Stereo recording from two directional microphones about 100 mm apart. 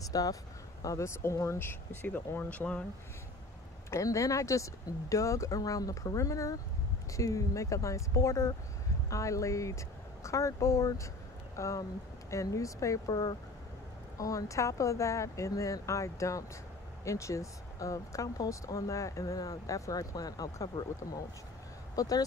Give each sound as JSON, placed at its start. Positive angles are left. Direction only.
{"t": 0.1, "sound": "speech", "side_deg": 35}
{"t": 3.9, "sound": "speech", "side_deg": 30}